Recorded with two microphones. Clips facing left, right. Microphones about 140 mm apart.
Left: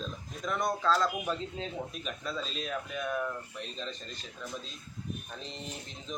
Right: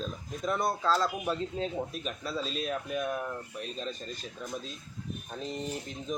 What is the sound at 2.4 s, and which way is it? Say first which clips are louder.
Speech: right 3 dB; 45° right (ahead or behind).